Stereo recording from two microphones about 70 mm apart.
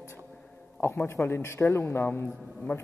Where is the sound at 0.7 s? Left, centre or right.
Left.